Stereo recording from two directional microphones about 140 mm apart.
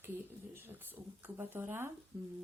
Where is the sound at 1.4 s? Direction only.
15° right (ahead or behind).